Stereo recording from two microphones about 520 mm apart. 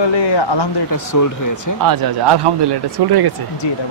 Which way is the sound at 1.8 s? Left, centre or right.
Right.